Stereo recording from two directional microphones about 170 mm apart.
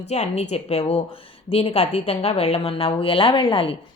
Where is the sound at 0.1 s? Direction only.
40° left (ahead or behind).